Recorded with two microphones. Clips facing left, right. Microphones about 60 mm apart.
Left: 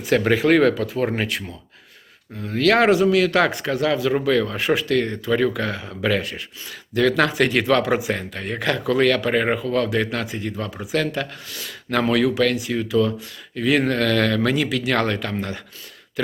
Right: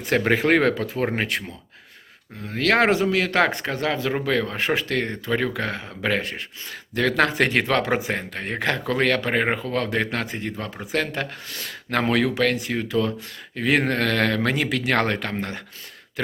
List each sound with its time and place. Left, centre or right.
0.0 s speech: right
2.4 s speech: right